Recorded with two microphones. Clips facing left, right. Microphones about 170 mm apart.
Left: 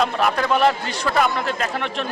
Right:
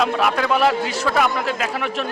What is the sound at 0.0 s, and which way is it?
A man's voice, centre (ahead or behind).